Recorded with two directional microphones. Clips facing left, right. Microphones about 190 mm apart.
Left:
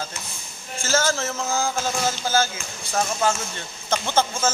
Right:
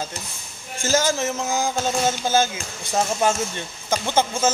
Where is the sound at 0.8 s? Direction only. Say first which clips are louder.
Right 2 dB; 15° right (ahead or behind).